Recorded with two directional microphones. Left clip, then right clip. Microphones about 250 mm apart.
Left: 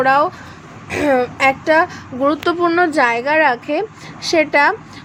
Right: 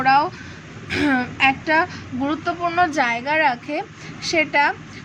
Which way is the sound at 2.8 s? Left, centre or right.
Centre.